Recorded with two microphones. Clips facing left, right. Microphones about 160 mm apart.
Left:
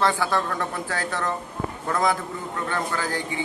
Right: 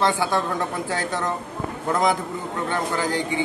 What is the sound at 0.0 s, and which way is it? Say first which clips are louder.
A man's voice: right 1 dB; 15° right (ahead or behind).